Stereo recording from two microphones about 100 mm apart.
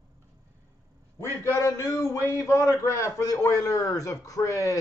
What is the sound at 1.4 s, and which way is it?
A man's voice, 30° left (ahead or behind).